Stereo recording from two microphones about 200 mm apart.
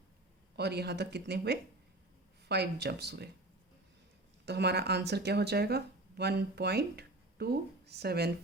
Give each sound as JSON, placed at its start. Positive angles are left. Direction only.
{"t": 0.5, "sound": "a woman's voice", "side_deg": -55}
{"t": 4.4, "sound": "speech", "side_deg": -55}